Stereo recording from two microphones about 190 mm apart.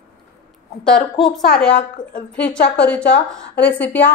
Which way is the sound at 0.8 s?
5° left (ahead or behind).